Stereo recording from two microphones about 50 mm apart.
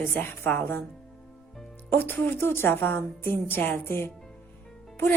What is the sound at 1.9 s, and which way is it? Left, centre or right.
A woman's voice, left.